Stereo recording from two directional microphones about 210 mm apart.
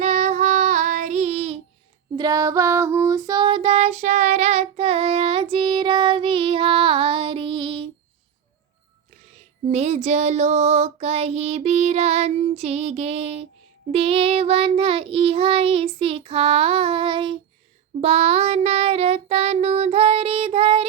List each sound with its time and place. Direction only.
0.0 s child singing: 35° right (ahead or behind)
2.1 s child singing: 20° right (ahead or behind)
9.7 s child singing: 30° right (ahead or behind)